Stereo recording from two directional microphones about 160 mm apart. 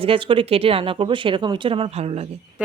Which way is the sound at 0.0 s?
35° right (ahead or behind).